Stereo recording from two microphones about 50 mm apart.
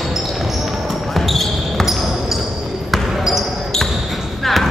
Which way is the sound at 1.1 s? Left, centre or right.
Centre.